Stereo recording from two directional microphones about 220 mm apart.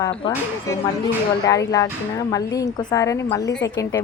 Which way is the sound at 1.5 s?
15° left (ahead or behind).